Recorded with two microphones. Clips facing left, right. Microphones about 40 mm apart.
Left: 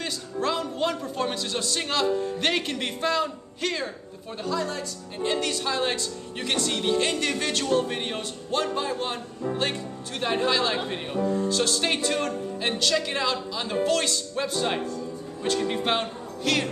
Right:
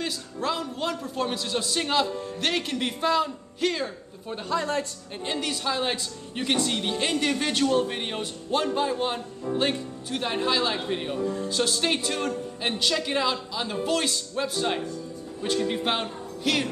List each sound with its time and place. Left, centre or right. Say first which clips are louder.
0.0 s a woman's voice: left 1 dB; centre
2.1 s a woman's voice: left 2 dB; centre
4.5 s a woman's voice: right 1 dB; right
5.2 s a woman's voice: left 3 dB; centre
11.1 s speech: left 3 dB; centre
11.4 s a woman's voice: left 1 dB; centre